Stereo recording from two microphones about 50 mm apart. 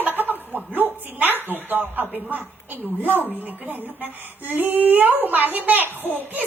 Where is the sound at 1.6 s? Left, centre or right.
Right.